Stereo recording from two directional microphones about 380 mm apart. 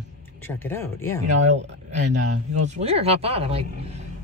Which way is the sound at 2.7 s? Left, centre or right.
Centre.